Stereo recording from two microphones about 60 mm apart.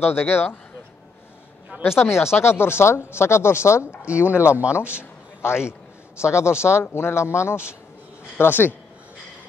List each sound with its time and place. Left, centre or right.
0.0 s speech: left
1.8 s speech: left
4.0 s speech: right
4.9 s a sound: left
6.2 s speech: left
8.4 s speech: left